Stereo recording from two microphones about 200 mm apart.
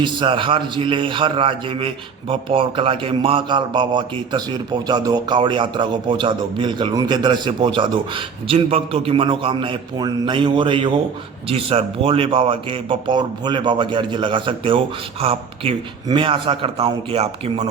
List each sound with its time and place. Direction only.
0.0 s a man's voice: 25° right (ahead or behind)